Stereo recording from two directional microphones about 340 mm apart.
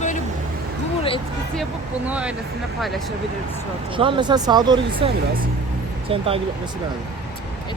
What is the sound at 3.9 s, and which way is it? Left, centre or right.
Speech, centre.